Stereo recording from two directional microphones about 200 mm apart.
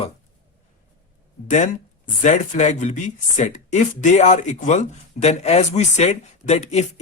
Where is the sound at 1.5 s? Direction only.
40° left (ahead or behind).